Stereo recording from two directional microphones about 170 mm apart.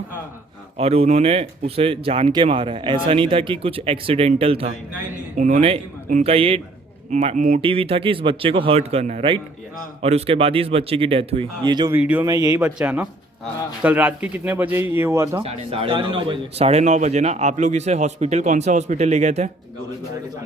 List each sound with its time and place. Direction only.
0.8 s a man's voice: 35° right (ahead or behind)
5.4 s a man's voice: 45° right (ahead or behind); by 11.9 s 25° right (ahead or behind)
11.9 s a man's voice: 10° right (ahead or behind)
15.4 s a man's voice: 35° right (ahead or behind)